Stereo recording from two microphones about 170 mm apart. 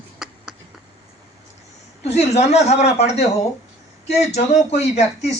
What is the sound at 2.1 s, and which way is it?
Speech, 40° left (ahead or behind).